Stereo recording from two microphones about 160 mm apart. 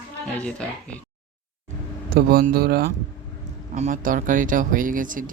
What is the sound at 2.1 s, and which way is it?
Speech, 70° right (ahead or behind).